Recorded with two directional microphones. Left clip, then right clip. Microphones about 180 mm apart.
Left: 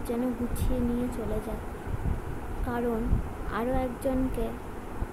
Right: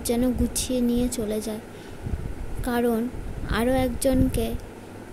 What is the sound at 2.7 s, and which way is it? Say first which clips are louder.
A child's voice: right 6 dB; 55° right (ahead or behind).